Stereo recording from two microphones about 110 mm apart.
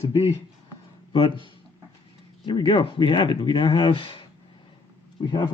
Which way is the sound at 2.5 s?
50° left (ahead or behind).